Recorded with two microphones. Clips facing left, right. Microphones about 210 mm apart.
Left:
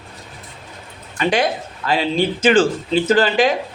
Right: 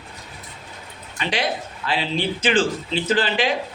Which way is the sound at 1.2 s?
45° left (ahead or behind).